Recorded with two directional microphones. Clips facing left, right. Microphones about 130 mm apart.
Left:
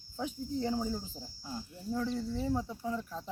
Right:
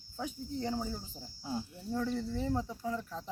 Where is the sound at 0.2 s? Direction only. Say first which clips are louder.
Left 3 dB; 15° left (ahead or behind).